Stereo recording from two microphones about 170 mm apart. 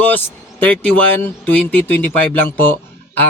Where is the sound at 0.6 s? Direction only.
10° left (ahead or behind).